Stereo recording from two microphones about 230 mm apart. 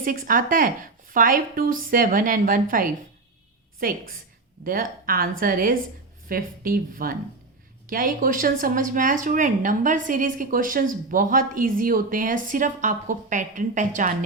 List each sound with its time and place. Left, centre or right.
0.0 s speech: right